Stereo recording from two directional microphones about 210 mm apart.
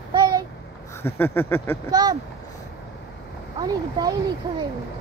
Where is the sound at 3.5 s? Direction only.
20° right (ahead or behind).